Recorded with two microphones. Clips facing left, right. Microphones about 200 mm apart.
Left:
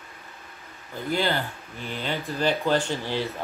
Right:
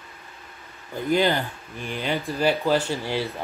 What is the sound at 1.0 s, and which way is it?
Speech, 15° right (ahead or behind).